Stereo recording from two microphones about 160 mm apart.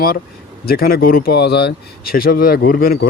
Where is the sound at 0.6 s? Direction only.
70° left (ahead or behind).